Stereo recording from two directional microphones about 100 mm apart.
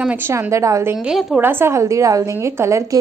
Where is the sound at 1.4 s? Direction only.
20° right (ahead or behind).